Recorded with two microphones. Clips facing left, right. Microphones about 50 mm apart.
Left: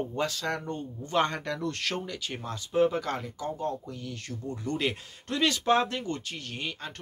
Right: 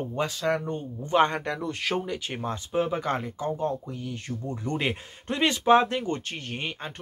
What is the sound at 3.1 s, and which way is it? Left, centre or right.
Speech, right.